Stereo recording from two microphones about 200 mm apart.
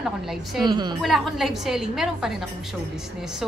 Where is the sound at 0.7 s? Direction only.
20° right (ahead or behind).